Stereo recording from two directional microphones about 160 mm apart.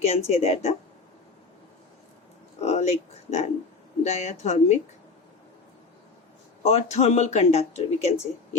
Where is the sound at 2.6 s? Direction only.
40° left (ahead or behind).